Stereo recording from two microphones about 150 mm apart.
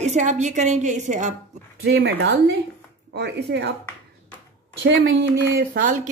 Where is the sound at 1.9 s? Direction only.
90° right.